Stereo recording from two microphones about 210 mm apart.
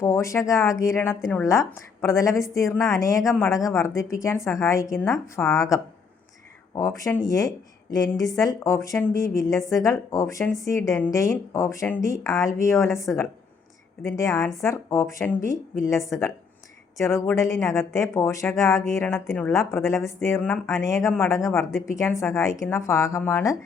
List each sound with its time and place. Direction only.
0.0 s speech: 15° left (ahead or behind)
17.0 s speech: 15° left (ahead or behind)
19.1 s speech: centre (ahead or behind)
19.5 s speech: 10° left (ahead or behind)